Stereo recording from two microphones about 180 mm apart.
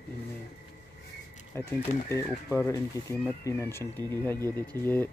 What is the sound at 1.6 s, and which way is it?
Speech, 15° left (ahead or behind).